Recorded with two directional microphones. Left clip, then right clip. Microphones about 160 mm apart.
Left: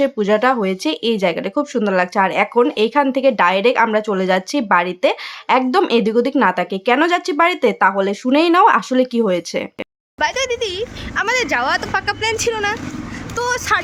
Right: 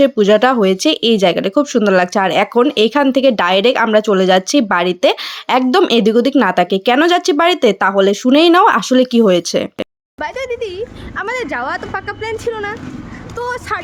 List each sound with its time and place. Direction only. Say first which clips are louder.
0.0 s speech: right 5 dB; 25° right (ahead or behind)